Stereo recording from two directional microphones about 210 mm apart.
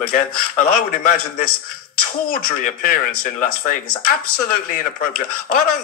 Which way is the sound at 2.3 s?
40° left (ahead or behind).